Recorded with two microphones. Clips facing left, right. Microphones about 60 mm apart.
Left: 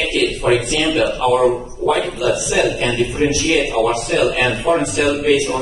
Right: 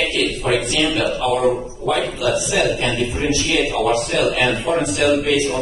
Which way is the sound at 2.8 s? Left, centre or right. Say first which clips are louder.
Left 3 dB; left.